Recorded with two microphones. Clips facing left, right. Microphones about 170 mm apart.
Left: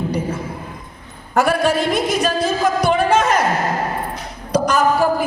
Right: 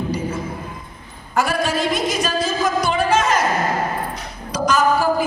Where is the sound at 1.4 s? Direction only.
60° left (ahead or behind).